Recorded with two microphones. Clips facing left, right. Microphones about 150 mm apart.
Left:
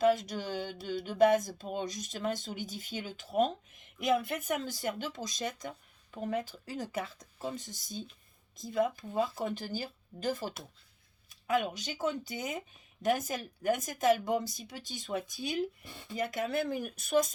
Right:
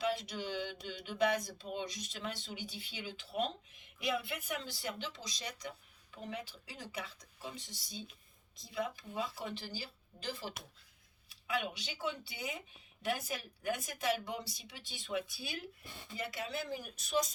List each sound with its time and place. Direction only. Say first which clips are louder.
0.0 s speech: left 9 dB; 45° left (ahead or behind)